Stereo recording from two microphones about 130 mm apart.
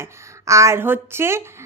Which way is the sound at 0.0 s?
25° right (ahead or behind).